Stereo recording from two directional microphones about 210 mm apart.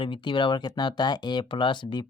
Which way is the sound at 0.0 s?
25° left (ahead or behind).